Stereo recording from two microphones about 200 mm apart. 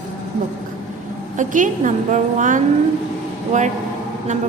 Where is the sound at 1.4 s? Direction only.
40° right (ahead or behind).